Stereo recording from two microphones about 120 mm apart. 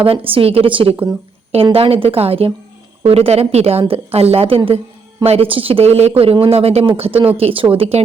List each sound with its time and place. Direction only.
0.0 s a woman's voice: 50° right (ahead or behind)